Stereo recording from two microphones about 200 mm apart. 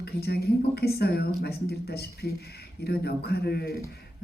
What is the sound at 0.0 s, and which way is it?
A man's voice, 55° left (ahead or behind).